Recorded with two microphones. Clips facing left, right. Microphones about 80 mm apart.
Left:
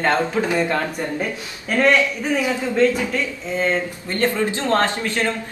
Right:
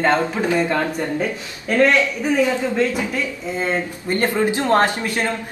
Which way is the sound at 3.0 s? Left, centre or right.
Centre.